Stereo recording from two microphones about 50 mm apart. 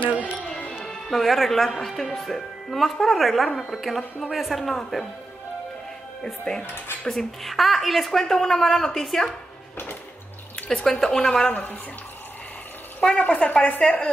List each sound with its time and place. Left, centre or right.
0.1 s music: right
0.4 s music: left
0.8 s speech: centre
6.2 s a woman's voice: centre
6.6 s speech: left
7.1 s a woman's voice: centre
10.7 s a woman's voice: centre
13.3 s speech: left